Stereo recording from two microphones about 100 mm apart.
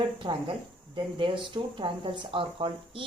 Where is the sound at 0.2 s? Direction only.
55° right (ahead or behind).